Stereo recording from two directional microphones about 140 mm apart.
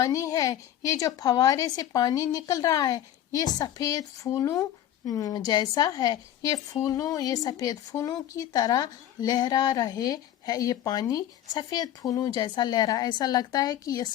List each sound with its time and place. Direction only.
0.0 s a woman's voice: 25° left (ahead or behind)